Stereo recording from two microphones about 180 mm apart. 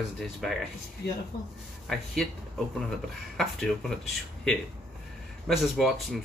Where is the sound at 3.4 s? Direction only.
Centre (ahead or behind).